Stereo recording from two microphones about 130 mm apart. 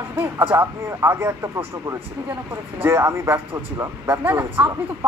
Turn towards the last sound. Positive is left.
turn(degrees=-20)  # may be behind; listen again after turning